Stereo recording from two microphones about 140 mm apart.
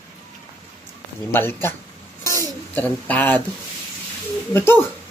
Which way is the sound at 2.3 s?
15° left (ahead or behind).